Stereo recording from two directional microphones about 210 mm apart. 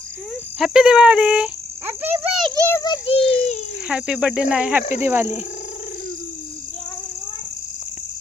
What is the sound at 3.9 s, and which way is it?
Speech, 5° right (ahead or behind).